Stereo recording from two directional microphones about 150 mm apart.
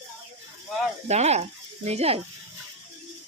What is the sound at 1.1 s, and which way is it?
Speech, 45° right (ahead or behind).